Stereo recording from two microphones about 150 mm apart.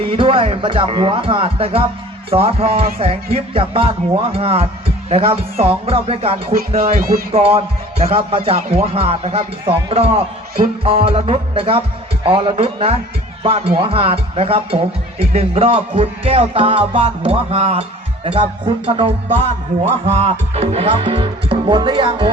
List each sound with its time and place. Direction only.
0.0 s a man's voice: 40° right (ahead or behind)
6.7 s speech: 60° right (ahead or behind)
7.3 s a man's voice: 40° right (ahead or behind)
19.9 s music: 45° right (ahead or behind)
20.5 s a man's voice: 45° right (ahead or behind)